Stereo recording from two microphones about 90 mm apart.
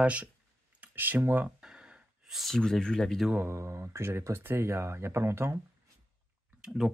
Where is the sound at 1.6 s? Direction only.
10° right (ahead or behind).